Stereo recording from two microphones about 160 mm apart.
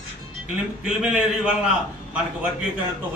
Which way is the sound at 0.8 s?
5° right (ahead or behind).